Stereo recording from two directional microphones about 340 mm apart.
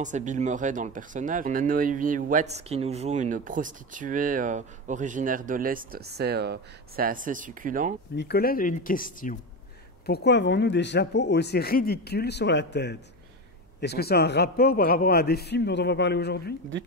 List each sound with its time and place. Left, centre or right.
0.0 s speech: right
8.2 s speech: left